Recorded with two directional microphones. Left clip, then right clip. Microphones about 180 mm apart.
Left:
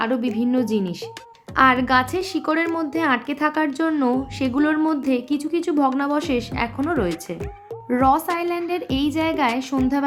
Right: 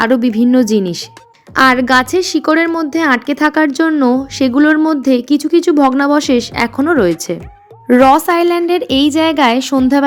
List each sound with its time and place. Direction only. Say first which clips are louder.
0.0 s a woman's voice: right 10 dB; 40° right (ahead or behind)